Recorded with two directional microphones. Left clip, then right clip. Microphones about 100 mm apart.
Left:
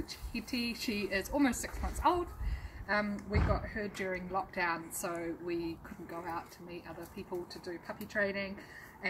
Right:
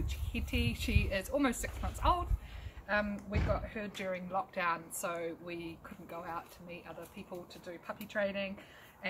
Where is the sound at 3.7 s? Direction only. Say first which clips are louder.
Left 2 dB; 20° right (ahead or behind).